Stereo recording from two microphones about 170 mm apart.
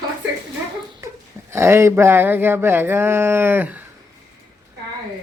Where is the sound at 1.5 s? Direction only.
15° right (ahead or behind).